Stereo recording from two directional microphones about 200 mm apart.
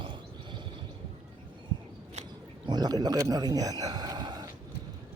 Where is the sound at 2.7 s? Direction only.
20° right (ahead or behind).